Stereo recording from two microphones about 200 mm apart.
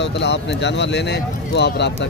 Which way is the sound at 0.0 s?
60° left (ahead or behind).